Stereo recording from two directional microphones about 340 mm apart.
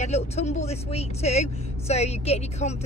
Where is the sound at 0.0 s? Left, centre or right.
Centre.